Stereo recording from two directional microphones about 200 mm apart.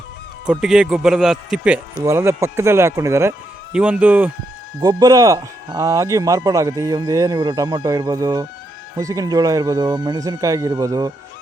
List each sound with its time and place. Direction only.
0.6 s a man's voice: centre (ahead or behind)
4.8 s speech: 20° right (ahead or behind)